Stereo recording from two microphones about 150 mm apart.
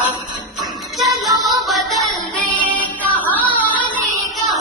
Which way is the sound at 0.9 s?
Centre (ahead or behind).